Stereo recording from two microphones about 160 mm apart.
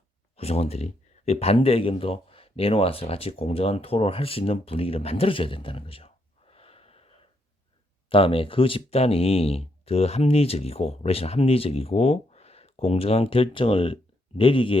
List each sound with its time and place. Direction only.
0.3 s speech: 40° left (ahead or behind)
6.5 s wheeze: 40° left (ahead or behind)
8.1 s speech: 35° left (ahead or behind)